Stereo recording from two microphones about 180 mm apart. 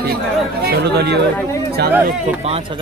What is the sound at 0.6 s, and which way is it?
Speech, 65° right (ahead or behind).